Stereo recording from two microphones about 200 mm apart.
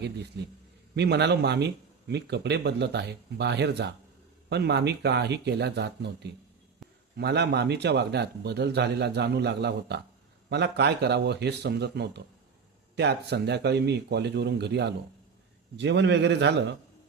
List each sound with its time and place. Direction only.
0.9 s speech: 55° right (ahead or behind)
6.8 s a sound: centre (ahead or behind)
7.2 s speech: 55° right (ahead or behind)